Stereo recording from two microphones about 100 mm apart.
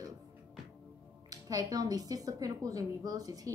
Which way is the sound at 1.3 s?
40° right (ahead or behind).